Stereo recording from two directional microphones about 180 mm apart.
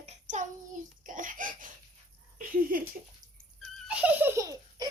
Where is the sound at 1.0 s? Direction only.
45° right (ahead or behind).